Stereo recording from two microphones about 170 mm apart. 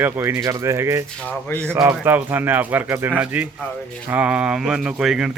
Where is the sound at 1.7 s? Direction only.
10° right (ahead or behind).